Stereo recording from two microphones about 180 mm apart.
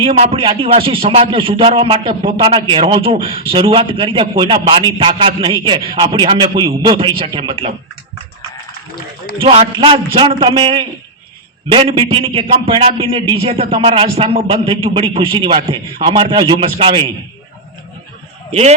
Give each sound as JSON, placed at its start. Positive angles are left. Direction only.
{"t": 0.0, "sound": "speech", "side_deg": -30}
{"t": 9.4, "sound": "a man's voice", "side_deg": -30}